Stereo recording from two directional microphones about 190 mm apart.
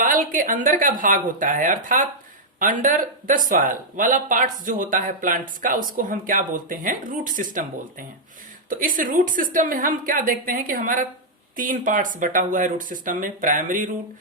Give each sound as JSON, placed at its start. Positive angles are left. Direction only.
{"t": 0.0, "sound": "speech", "side_deg": -45}